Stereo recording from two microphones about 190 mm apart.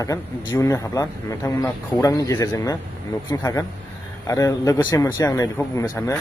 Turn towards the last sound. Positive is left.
turn(degrees=15)  # may be behind; listen again after turning